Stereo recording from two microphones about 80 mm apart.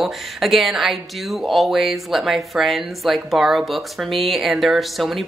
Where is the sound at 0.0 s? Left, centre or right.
Centre.